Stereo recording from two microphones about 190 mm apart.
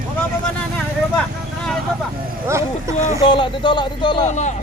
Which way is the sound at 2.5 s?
15° right (ahead or behind).